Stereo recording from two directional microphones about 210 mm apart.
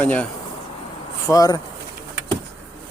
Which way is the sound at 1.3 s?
15° left (ahead or behind).